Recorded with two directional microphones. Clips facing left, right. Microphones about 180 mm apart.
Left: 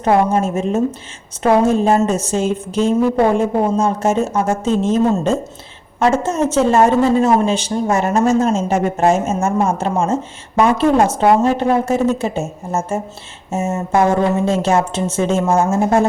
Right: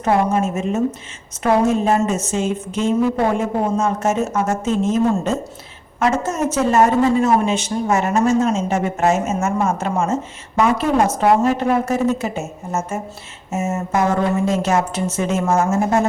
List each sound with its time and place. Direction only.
0.0 s a woman's voice: 30° left (ahead or behind)